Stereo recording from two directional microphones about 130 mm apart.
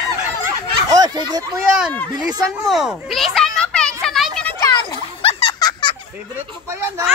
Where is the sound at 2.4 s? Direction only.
Centre (ahead or behind).